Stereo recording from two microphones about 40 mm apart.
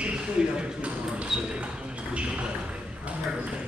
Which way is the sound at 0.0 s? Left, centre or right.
Right.